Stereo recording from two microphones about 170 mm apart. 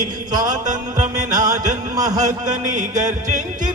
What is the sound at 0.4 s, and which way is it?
Music, 45° right (ahead or behind).